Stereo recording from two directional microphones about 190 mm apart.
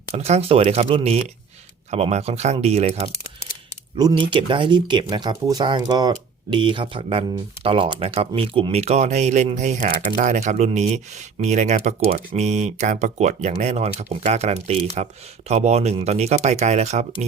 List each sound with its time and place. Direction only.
0.1 s speech: 35° right (ahead or behind)